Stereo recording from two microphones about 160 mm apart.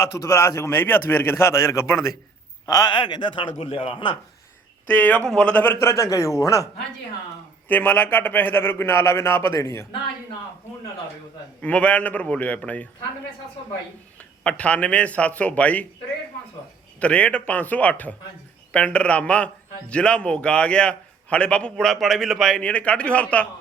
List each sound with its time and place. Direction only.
0.0 s a man's voice: 20° left (ahead or behind)
4.9 s a man's voice: 10° left (ahead or behind)
7.7 s a man's voice: 10° left (ahead or behind)
11.6 s a man's voice: 10° left (ahead or behind)
14.2 s a man's voice: 10° left (ahead or behind)
17.0 s a man's voice: 10° left (ahead or behind)